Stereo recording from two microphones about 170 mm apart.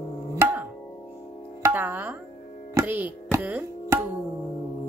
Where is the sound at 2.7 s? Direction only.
10° right (ahead or behind).